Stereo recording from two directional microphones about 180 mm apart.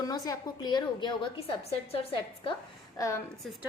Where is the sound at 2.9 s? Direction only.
20° left (ahead or behind).